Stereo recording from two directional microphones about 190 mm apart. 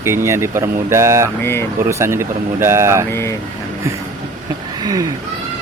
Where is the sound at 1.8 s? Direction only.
15° right (ahead or behind).